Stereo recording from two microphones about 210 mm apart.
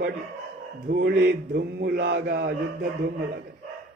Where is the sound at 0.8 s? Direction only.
45° right (ahead or behind).